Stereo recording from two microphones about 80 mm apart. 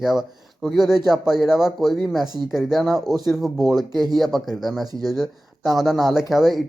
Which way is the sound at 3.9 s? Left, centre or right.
Right.